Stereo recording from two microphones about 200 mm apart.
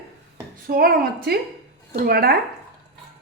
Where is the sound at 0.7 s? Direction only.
50° right (ahead or behind).